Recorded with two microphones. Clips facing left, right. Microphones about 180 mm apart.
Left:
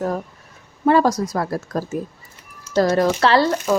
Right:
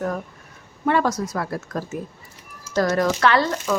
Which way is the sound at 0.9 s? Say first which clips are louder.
Left 5 dB; 35° left (ahead or behind).